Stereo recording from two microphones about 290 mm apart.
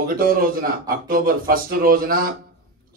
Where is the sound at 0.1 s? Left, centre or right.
Right.